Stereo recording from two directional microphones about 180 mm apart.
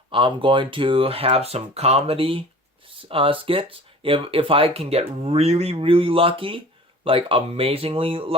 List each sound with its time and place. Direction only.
0.1 s speech: 30° right (ahead or behind)